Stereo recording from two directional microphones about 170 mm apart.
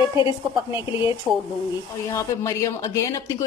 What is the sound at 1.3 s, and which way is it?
Speech, 5° right (ahead or behind).